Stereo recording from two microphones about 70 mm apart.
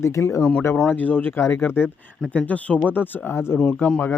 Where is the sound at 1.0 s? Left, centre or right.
Left.